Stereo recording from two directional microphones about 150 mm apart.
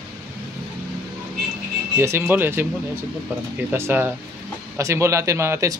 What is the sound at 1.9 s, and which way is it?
Speech, 15° right (ahead or behind).